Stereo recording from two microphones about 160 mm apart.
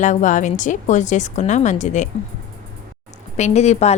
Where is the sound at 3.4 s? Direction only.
45° left (ahead or behind).